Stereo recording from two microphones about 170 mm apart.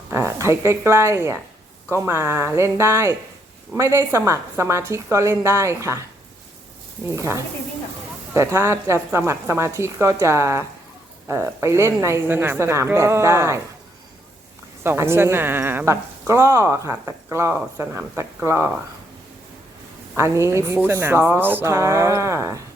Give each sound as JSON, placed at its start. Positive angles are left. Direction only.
{"t": 0.1, "sound": "a woman's voice", "side_deg": -15}
{"t": 7.1, "sound": "a woman's voice", "side_deg": -15}
{"t": 14.8, "sound": "a woman's voice", "side_deg": -15}
{"t": 20.1, "sound": "a woman's voice", "side_deg": -15}